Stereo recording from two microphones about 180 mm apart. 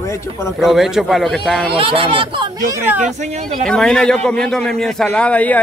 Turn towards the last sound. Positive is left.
turn(degrees=10)  # may be behind; listen again after turning